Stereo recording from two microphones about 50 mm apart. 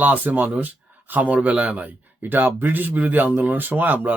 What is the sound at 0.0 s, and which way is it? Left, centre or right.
Speech, right.